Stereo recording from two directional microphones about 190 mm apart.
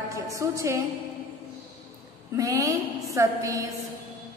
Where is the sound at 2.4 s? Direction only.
15° right (ahead or behind).